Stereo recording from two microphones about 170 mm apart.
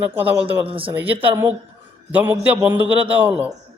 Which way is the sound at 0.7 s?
30° right (ahead or behind).